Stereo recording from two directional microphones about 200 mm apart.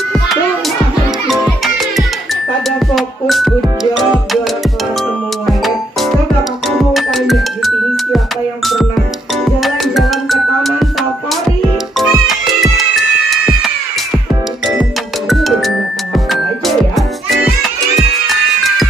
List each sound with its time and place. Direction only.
1.2 s music: centre (ahead or behind)
5.5 s music: centre (ahead or behind)
9.6 s music: centre (ahead or behind)
14.8 s music: centre (ahead or behind)